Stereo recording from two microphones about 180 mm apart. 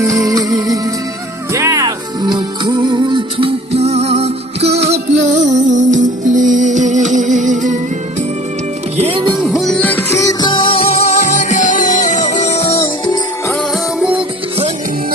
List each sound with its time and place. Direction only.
0.0 s music: 20° right (ahead or behind); by 7.8 s 45° right (ahead or behind)
9.0 s music: 30° right (ahead or behind)
9.4 s music: centre (ahead or behind); by 13.1 s 30° left (ahead or behind)